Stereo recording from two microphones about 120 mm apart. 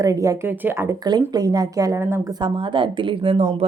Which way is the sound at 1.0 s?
35° right (ahead or behind).